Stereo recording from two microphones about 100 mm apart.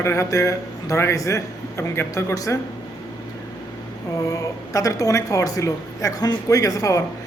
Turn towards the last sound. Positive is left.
turn(degrees=35)  # may be behind; listen again after turning